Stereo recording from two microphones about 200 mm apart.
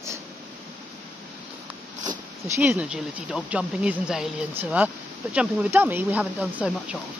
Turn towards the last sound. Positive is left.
turn(degrees=-5)  # may be behind; listen again after turning